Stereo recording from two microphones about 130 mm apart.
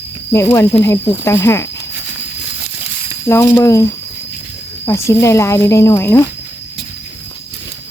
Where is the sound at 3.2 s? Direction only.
20° left (ahead or behind).